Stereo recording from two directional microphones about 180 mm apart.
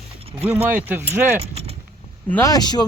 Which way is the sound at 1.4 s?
35° right (ahead or behind).